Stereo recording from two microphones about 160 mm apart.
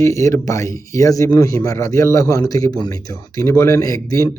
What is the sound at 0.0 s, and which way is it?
Speech, 20° left (ahead or behind).